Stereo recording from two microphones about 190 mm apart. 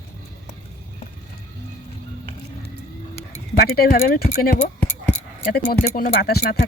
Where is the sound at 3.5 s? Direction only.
55° left (ahead or behind).